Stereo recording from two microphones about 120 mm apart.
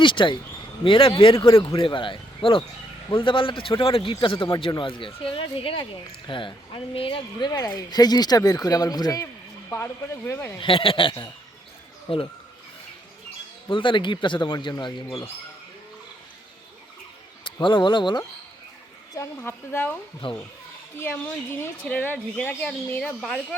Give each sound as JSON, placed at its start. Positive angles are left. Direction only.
{"t": 0.0, "sound": "a man's voice", "side_deg": 45}
{"t": 9.6, "sound": "speech", "side_deg": 20}
{"t": 10.6, "sound": "a man's voice", "side_deg": 50}
{"t": 13.7, "sound": "speech", "side_deg": 45}
{"t": 17.4, "sound": "speech", "side_deg": 45}
{"t": 19.1, "sound": "speech", "side_deg": 25}
{"t": 20.2, "sound": "a man's voice", "side_deg": 45}
{"t": 21.0, "sound": "speech", "side_deg": 20}